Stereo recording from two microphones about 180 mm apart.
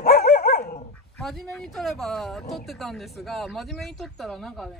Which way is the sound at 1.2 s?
Centre (ahead or behind).